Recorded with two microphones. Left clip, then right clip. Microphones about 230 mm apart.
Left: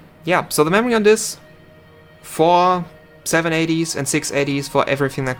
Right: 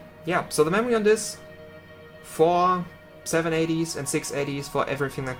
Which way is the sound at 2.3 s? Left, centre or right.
Left.